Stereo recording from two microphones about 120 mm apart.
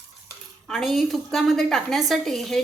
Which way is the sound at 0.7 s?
Centre (ahead or behind).